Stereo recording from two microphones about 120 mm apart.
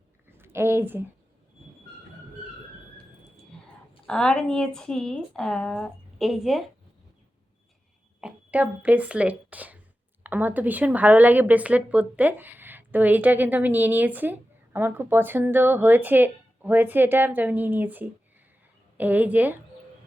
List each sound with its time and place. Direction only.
0.3 s a sound: 20° right (ahead or behind)
4.0 s a woman's voice: 5° left (ahead or behind)
8.2 s a woman's voice: 10° right (ahead or behind)